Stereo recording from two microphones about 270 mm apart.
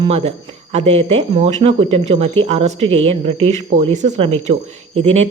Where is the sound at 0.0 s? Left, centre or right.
Right.